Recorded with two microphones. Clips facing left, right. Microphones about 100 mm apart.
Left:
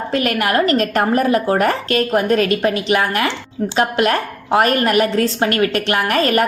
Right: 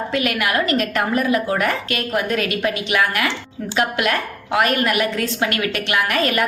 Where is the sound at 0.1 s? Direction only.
40° left (ahead or behind).